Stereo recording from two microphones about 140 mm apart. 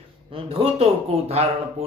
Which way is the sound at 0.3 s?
40° right (ahead or behind).